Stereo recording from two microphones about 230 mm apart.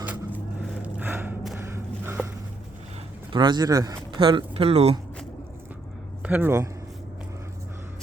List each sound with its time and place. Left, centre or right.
0.0 s a sound: centre
3.3 s speech: centre
6.2 s a man's voice: centre